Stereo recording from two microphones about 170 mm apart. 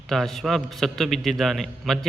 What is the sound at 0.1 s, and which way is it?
A man's voice, centre (ahead or behind).